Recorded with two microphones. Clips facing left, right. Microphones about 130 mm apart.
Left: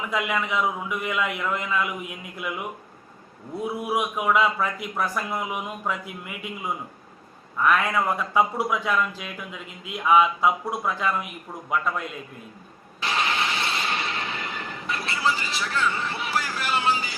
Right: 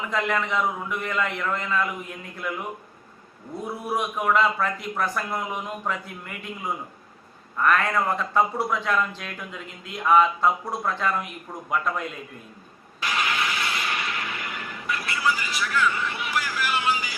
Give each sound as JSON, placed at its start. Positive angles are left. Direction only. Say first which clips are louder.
{"t": 0.1, "sound": "a man's voice", "louder": "right 1 dB", "side_deg": 5}
{"t": 3.8, "sound": "a man's voice", "louder": "even", "side_deg": 10}
{"t": 13.0, "sound": "vehicle", "louder": "left 1 dB", "side_deg": 30}